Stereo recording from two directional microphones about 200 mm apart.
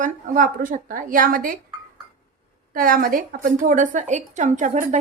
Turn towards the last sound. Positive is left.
turn(degrees=-35)  # may be behind; listen again after turning